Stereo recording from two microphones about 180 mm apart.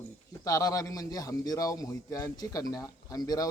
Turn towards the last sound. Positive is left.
turn(degrees=20)  # may be behind; listen again after turning